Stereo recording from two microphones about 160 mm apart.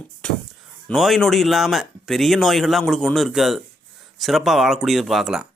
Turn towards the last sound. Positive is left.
turn(degrees=0)  # may be behind; listen again after turning